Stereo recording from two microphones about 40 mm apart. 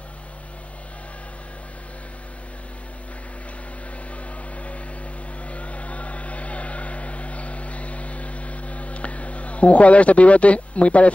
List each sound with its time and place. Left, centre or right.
5.4 s vehicle: left